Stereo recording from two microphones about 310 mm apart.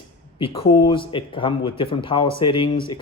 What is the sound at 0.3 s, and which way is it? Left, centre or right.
Speech, centre.